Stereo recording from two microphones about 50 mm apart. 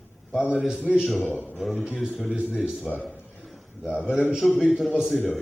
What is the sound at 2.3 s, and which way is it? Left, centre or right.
Speech, centre.